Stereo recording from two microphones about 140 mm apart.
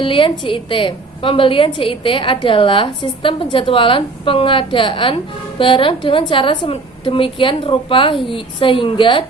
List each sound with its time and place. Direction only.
0.0 s a woman's voice: 40° left (ahead or behind)